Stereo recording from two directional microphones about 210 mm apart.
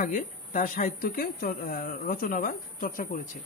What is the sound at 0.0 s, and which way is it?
A woman's voice, 40° left (ahead or behind).